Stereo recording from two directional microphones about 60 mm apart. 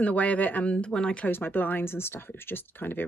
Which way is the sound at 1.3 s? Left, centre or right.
Left.